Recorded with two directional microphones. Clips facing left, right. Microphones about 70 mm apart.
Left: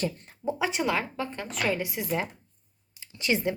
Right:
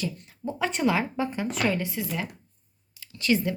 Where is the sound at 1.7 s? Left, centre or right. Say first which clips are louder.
Left 1 dB; centre.